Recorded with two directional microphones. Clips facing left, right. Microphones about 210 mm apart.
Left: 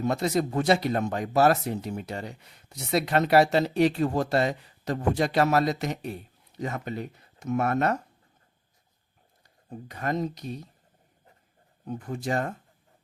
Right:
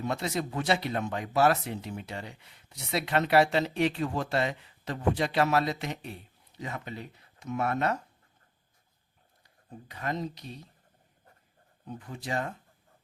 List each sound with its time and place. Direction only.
0.0 s speech: 40° left (ahead or behind)
9.9 s speech: 45° left (ahead or behind)
11.9 s speech: 45° left (ahead or behind)